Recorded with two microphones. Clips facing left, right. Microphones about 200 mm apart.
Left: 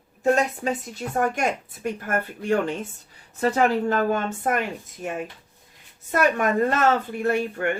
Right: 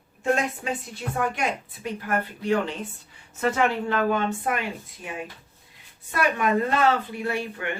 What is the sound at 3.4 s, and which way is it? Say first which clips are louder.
A woman's voice: left 3 dB; 35° left (ahead or behind).